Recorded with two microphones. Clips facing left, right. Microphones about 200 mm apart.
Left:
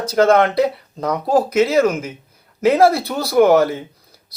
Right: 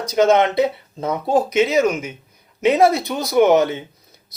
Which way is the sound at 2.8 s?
20° right (ahead or behind).